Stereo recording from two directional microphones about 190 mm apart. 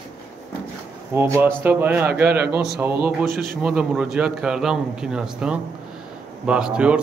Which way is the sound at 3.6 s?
5° right (ahead or behind).